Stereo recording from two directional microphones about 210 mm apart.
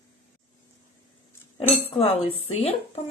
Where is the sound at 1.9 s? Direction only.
30° left (ahead or behind).